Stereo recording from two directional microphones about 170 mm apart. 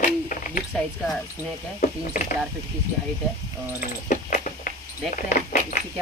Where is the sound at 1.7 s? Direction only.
55° left (ahead or behind).